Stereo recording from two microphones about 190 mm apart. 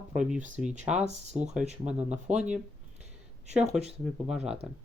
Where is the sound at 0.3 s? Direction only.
40° right (ahead or behind).